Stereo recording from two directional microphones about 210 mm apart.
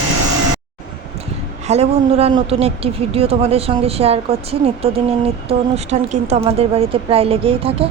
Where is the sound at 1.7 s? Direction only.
30° right (ahead or behind).